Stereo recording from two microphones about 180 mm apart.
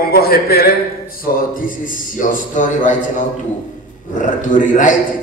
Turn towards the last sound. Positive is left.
turn(degrees=45)  # may be behind; listen again after turning